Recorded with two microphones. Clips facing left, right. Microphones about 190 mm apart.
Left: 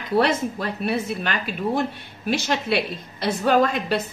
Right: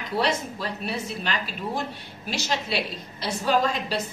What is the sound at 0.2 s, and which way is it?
A woman's voice, 55° left (ahead or behind).